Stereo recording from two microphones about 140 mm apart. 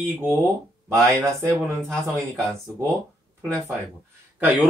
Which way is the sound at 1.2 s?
20° right (ahead or behind).